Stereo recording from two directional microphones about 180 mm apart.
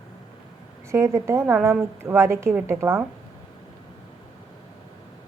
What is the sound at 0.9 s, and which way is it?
A woman's voice, 15° right (ahead or behind).